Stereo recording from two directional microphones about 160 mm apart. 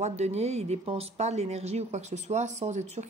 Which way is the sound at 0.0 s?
45° right (ahead or behind).